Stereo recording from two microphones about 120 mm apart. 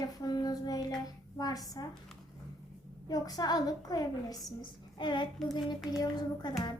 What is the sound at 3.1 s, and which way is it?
A woman's voice, 35° left (ahead or behind).